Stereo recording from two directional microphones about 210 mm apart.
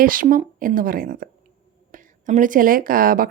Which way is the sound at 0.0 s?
40° right (ahead or behind).